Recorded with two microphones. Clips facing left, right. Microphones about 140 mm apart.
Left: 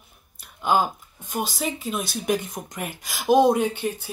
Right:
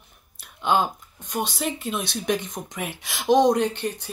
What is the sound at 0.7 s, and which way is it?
Speech, 5° left (ahead or behind).